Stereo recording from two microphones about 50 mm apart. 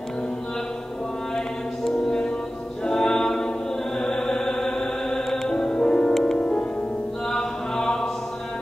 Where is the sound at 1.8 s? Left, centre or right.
Centre.